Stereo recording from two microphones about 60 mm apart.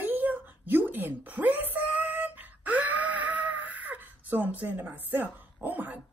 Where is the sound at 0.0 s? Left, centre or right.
Right.